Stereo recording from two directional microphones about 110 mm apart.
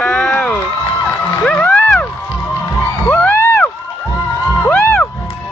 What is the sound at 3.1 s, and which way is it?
Crowd, 15° left (ahead or behind).